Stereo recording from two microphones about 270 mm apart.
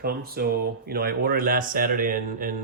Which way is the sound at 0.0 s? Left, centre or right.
Right.